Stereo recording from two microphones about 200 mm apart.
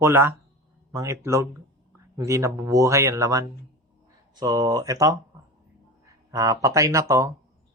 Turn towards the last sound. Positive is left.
turn(degrees=-15)  # may be behind; listen again after turning